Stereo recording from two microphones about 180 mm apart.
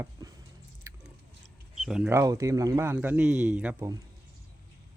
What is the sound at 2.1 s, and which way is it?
Speech, 15° right (ahead or behind).